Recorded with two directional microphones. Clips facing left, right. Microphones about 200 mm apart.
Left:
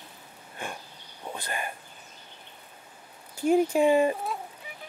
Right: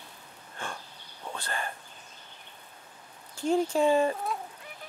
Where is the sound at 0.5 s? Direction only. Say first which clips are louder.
Left 2 dB; 15° left (ahead or behind).